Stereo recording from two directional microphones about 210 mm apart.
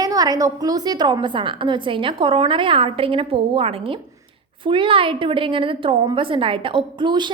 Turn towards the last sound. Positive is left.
turn(degrees=-20)  # may be behind; listen again after turning